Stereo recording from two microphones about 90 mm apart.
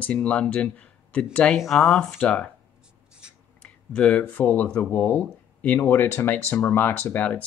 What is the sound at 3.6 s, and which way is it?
Speech, 15° left (ahead or behind).